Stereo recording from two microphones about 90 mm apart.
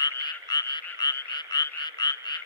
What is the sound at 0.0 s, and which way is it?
Frog, 50° left (ahead or behind).